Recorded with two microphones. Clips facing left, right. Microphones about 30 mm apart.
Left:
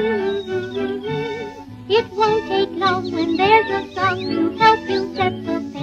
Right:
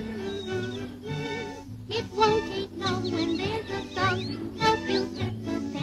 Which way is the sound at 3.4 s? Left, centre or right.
Left.